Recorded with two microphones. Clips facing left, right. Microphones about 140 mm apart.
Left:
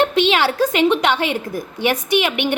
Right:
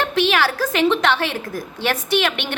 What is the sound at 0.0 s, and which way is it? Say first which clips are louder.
A woman's voice: left 3 dB; 20° left (ahead or behind).